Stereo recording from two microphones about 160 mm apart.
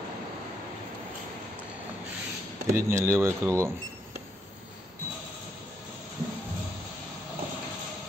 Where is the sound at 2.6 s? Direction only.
20° right (ahead or behind).